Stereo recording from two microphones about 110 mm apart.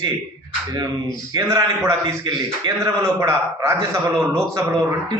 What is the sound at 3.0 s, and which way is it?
A man's voice, 25° right (ahead or behind).